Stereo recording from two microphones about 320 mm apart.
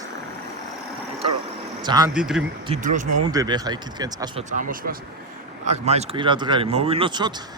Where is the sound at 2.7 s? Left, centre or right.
Right.